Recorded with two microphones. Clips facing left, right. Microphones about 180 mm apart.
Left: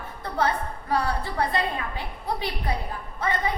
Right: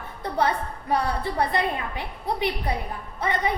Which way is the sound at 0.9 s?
20° right (ahead or behind).